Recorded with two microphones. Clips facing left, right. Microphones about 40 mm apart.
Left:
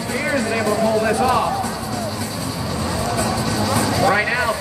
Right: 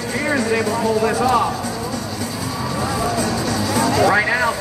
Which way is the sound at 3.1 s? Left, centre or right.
Centre.